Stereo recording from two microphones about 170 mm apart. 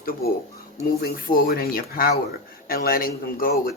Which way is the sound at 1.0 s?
60° left (ahead or behind).